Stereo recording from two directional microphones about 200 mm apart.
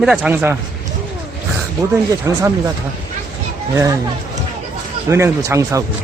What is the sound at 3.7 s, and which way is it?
Speech, 15° right (ahead or behind).